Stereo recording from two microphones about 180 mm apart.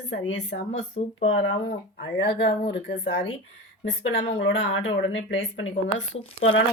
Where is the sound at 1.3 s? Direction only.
90° left.